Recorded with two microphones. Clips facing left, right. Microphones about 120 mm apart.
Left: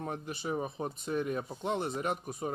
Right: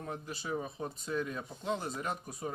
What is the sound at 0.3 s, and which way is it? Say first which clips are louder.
Speech: left 1 dB; 20° left (ahead or behind).